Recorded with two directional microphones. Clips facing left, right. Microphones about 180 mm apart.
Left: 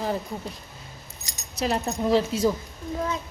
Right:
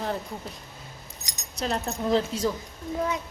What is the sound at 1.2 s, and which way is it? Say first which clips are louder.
Keys jangling: left 1 dB; 15° right (ahead or behind).